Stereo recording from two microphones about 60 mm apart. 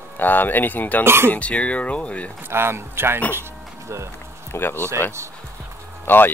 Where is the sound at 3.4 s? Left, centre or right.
Right.